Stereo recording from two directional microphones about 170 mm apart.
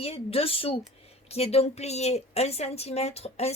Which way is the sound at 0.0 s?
35° left (ahead or behind).